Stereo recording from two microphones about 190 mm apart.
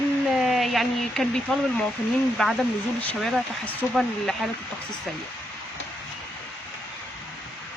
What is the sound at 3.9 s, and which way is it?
Speech, centre (ahead or behind).